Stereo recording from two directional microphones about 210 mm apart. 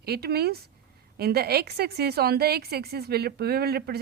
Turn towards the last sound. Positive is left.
turn(degrees=-50)  # may be behind; listen again after turning